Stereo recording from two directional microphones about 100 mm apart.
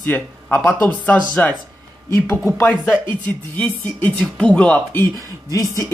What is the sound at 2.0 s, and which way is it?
Speech, 30° left (ahead or behind).